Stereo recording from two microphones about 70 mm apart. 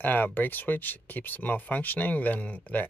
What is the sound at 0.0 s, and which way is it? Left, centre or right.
Speech, left.